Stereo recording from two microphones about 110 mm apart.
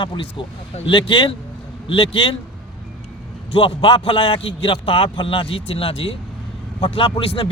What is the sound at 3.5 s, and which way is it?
A man's voice, 50° left (ahead or behind).